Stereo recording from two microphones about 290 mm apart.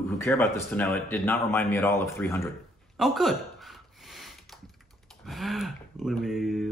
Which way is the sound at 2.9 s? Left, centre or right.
Centre.